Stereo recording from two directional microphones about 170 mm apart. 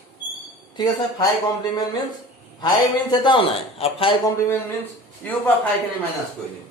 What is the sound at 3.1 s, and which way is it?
Speech, 25° left (ahead or behind).